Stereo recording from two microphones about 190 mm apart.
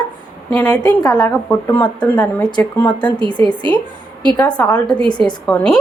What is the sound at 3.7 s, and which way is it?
Speech, 25° right (ahead or behind).